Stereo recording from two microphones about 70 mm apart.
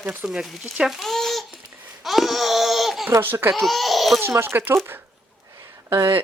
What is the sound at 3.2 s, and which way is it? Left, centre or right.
Speech, right.